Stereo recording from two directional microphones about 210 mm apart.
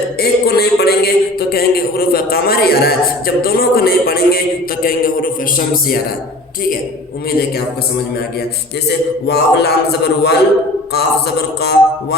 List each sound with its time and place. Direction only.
0.2 s a man's voice: 50° left (ahead or behind)
8.9 s a man's voice: 50° left (ahead or behind)